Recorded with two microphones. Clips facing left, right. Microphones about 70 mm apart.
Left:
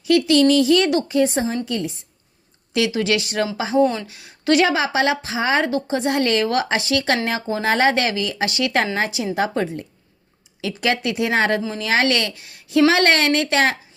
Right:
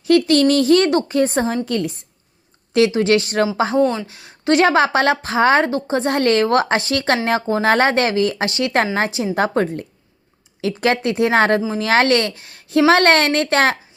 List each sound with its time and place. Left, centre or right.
0.0 s a woman's voice: right
2.7 s a woman's voice: right
5.6 s a woman's voice: right